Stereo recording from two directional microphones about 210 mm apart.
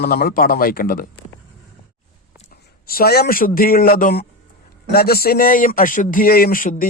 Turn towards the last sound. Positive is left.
turn(degrees=40)  # may be behind; listen again after turning